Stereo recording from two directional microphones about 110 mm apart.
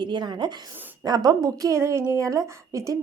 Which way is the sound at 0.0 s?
40° right (ahead or behind).